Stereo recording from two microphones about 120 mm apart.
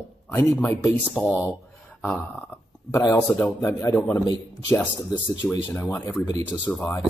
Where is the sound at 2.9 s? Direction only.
25° left (ahead or behind).